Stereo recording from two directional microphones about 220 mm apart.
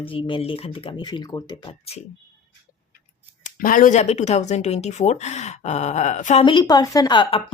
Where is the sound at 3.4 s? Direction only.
40° left (ahead or behind).